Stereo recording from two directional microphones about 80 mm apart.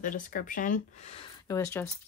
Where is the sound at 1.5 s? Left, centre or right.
Left.